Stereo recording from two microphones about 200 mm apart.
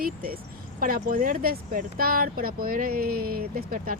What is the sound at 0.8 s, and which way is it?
Speech, 45° right (ahead or behind).